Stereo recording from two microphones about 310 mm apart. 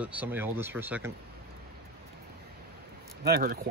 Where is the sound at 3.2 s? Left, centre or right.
Right.